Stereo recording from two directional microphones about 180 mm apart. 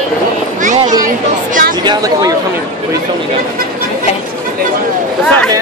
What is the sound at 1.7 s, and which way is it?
Speech, 20° right (ahead or behind).